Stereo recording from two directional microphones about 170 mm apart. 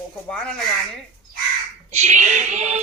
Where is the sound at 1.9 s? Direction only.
40° right (ahead or behind).